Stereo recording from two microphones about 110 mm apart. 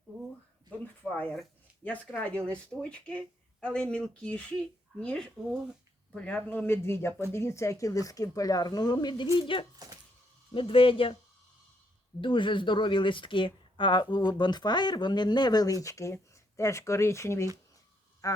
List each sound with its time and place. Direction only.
1.1 s speech: 15° left (ahead or behind); by 9.3 s 40° left (ahead or behind)
9.4 s speech: 50° left (ahead or behind)
12.2 s speech: 50° left (ahead or behind); by 18.4 s 30° left (ahead or behind)